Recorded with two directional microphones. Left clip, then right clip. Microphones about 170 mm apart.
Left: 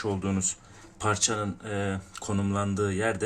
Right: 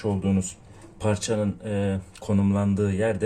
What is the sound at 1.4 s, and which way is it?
Speech, 50° left (ahead or behind).